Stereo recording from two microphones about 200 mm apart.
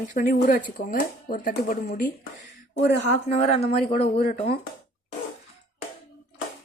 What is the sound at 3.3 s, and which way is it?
Speech, 30° left (ahead or behind).